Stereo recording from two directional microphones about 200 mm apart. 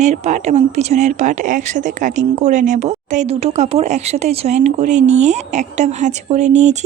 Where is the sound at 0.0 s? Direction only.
35° right (ahead or behind).